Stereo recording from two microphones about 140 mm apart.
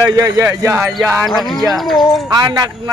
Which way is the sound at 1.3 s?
Centre (ahead or behind).